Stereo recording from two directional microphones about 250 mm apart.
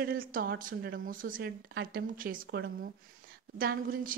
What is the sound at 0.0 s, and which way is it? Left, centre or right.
A woman's voice, right.